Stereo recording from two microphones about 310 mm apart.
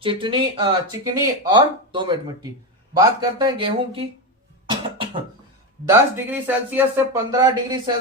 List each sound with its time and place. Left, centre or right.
0.0 s speech: centre
4.6 s cough: centre
5.9 s speech: centre